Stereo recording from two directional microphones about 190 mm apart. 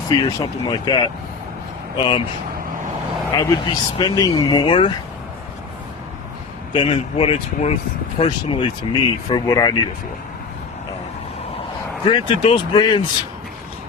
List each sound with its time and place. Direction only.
0.2 s speech: 20° left (ahead or behind)
3.3 s speech: 20° left (ahead or behind)
6.7 s speech: 30° left (ahead or behind)
12.0 s speech: 25° left (ahead or behind)